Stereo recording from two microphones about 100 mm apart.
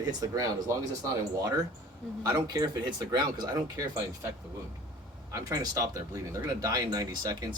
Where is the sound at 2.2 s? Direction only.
40° right (ahead or behind).